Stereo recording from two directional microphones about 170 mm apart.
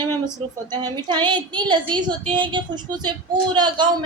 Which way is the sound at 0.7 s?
25° right (ahead or behind).